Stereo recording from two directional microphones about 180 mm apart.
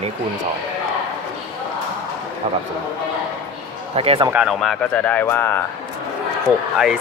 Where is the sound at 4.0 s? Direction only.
35° right (ahead or behind).